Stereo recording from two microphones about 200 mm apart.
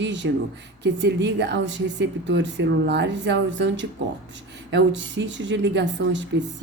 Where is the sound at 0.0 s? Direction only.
65° right (ahead or behind).